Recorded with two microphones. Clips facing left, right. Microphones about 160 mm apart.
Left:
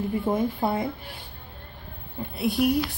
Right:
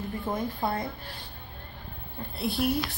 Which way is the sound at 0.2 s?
10° left (ahead or behind).